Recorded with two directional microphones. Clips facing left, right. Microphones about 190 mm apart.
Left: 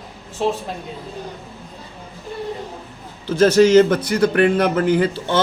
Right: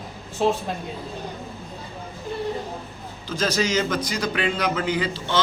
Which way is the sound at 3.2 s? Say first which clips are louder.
Left 11 dB; 65° left (ahead or behind).